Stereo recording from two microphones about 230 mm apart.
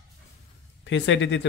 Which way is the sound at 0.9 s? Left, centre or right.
Left.